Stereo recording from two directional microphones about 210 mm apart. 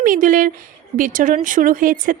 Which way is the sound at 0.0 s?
40° right (ahead or behind).